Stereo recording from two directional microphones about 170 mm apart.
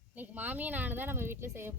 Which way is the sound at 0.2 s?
10° right (ahead or behind).